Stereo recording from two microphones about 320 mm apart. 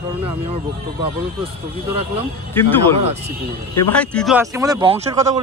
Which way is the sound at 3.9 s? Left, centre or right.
Centre.